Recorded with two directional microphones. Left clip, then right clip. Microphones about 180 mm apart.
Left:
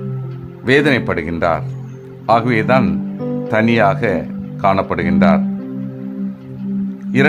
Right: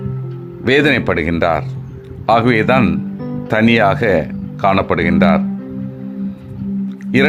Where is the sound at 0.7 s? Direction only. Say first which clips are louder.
Right 1 dB; 15° right (ahead or behind).